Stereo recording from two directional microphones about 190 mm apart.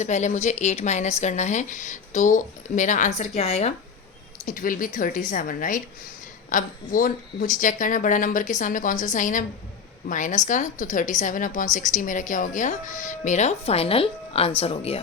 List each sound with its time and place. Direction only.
0.0 s a woman's voice: 40° left (ahead or behind)
4.4 s a woman's voice: 45° left (ahead or behind); by 15.0 s 30° left (ahead or behind)